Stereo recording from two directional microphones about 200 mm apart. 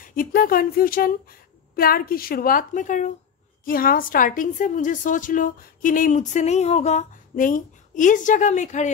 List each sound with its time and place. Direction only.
0.0 s a woman's voice: 45° left (ahead or behind)